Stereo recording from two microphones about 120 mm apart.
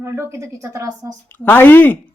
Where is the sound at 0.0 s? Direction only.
25° right (ahead or behind).